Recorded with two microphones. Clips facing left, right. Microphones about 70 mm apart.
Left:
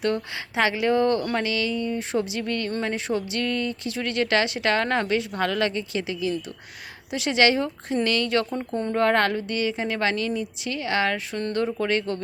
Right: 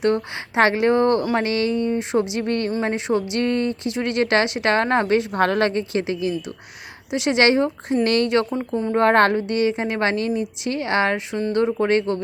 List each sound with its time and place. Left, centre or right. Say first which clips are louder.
0.0 s speech: right 5 dB; right
8.4 s speech: right 4 dB; centre
9.0 s speech: right 5 dB; right